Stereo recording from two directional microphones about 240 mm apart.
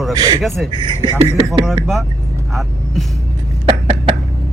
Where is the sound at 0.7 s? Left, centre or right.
Centre.